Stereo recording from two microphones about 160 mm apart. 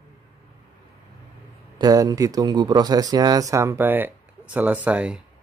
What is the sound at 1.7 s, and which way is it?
Speech, 20° right (ahead or behind).